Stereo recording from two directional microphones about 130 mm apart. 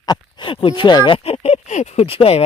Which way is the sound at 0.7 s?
35° left (ahead or behind).